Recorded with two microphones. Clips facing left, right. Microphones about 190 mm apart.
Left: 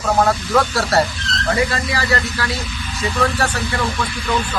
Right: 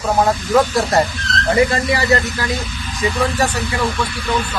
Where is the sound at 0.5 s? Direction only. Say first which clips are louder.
Right 4 dB; 15° right (ahead or behind).